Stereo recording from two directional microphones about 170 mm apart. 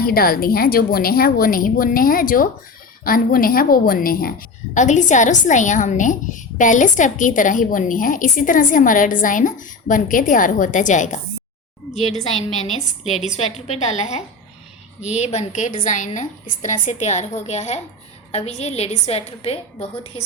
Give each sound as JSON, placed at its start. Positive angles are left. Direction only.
{"t": 0.0, "sound": "a woman's voice", "side_deg": 60}
{"t": 13.1, "sound": "a woman's voice", "side_deg": 40}